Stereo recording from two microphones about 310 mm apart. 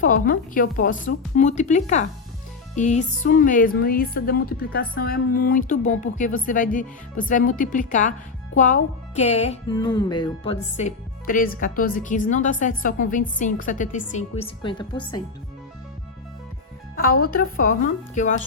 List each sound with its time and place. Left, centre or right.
0.0 s speech: left
16.9 s speech: left